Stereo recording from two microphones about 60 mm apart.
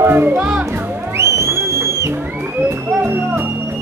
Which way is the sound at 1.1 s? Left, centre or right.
Right.